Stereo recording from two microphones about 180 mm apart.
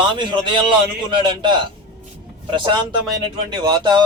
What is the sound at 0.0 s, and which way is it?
A man's voice, 25° right (ahead or behind).